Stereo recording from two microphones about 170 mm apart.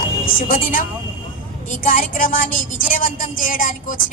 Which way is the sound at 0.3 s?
55° left (ahead or behind).